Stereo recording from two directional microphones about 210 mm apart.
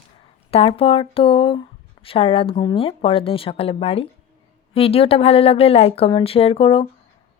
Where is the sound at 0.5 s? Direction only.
25° left (ahead or behind).